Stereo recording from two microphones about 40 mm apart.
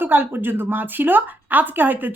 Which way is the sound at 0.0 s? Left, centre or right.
Right.